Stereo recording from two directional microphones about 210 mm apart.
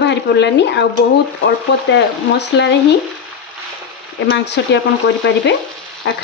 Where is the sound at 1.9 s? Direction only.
55° left (ahead or behind).